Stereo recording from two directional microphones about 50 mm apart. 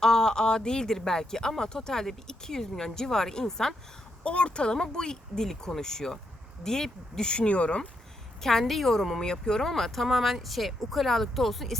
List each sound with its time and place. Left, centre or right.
0.0 s speech: centre
4.2 s speech: left
8.4 s speech: centre